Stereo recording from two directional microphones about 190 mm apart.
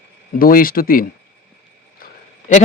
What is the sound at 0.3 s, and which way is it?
Speech, 50° left (ahead or behind).